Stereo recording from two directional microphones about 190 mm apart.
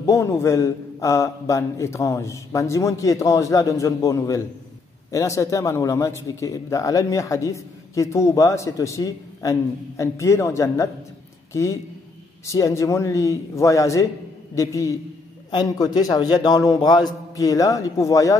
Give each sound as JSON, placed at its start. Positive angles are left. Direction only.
{"t": 0.0, "sound": "a man's voice", "side_deg": 15}